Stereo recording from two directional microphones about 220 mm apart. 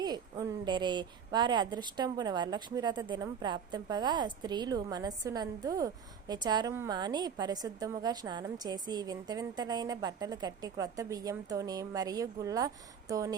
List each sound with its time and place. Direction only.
0.0 s a woman's voice: 15° right (ahead or behind)